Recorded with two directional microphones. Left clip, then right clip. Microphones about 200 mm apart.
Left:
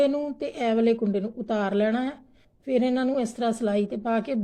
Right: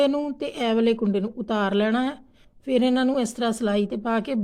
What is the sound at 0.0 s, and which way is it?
Speech, 25° right (ahead or behind).